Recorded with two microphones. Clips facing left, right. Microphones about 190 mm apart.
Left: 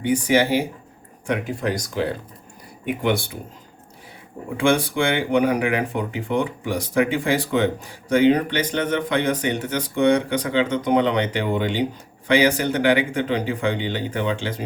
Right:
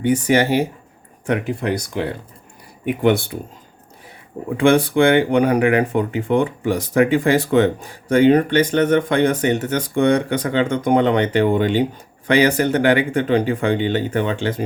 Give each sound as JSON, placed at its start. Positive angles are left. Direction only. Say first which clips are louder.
{"t": 0.3, "sound": "speech", "louder": "right 1 dB", "side_deg": -55}
{"t": 4.5, "sound": "speech", "louder": "right 5 dB", "side_deg": -55}